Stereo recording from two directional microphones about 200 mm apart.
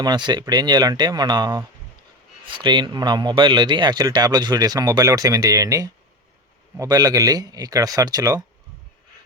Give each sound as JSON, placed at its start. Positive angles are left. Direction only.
{"t": 0.0, "sound": "speech", "side_deg": -20}